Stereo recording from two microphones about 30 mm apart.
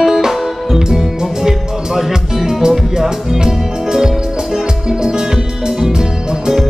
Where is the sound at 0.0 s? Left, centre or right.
Centre.